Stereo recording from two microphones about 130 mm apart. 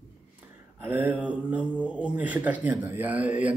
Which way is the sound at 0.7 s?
15° right (ahead or behind).